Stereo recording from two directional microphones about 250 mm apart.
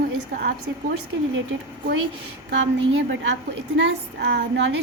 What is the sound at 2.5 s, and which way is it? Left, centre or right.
A woman's voice, right.